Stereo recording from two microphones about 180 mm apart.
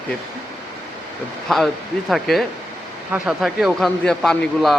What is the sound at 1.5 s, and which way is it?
A man's voice, centre (ahead or behind).